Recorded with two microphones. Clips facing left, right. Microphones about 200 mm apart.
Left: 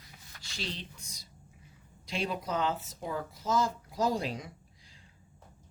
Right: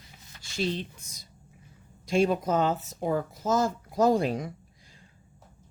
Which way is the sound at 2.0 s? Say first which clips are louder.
Right 10 dB; 45° right (ahead or behind).